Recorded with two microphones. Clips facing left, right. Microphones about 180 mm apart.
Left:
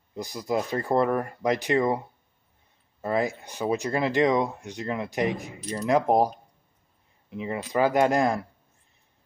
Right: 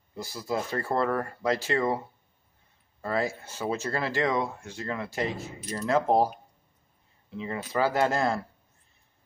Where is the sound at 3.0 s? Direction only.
20° left (ahead or behind).